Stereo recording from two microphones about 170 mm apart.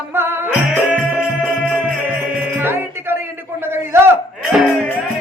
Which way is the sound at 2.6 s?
15° right (ahead or behind).